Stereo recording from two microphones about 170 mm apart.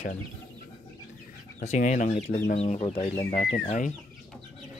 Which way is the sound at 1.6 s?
45° left (ahead or behind).